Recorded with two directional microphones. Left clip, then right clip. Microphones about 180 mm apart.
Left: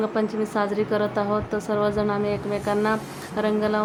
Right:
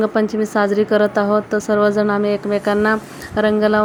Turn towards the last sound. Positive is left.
turn(degrees=-35)  # may be behind; listen again after turning